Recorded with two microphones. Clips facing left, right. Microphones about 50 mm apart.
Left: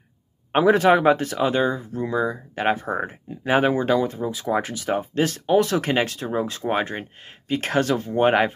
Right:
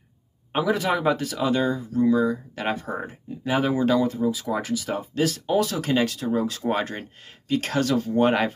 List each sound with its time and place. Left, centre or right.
0.5 s speech: left
3.8 s speech: left